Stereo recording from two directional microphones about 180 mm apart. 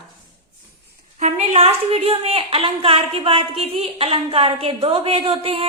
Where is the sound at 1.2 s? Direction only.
35° right (ahead or behind).